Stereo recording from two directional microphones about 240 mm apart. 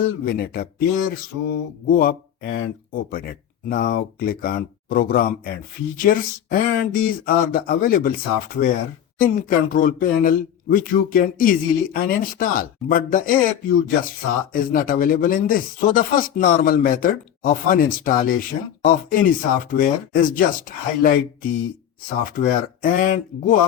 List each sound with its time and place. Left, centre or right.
0.3 s speech: left